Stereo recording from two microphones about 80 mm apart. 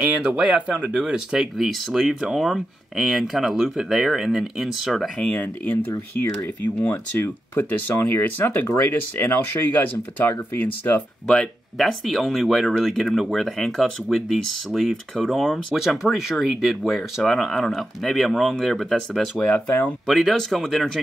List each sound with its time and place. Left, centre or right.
0.4 s speech: centre
5.3 s speech: left
11.2 s speech: centre